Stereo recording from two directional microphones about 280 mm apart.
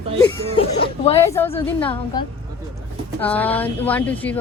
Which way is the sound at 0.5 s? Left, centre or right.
Centre.